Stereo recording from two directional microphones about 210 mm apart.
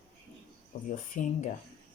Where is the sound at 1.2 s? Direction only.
35° left (ahead or behind).